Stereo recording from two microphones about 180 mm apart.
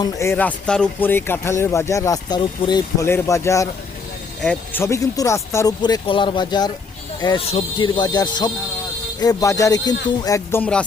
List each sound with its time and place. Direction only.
0.0 s speech: 15° left (ahead or behind)